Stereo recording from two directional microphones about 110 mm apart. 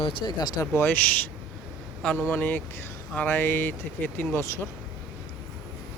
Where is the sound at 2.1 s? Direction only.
20° left (ahead or behind).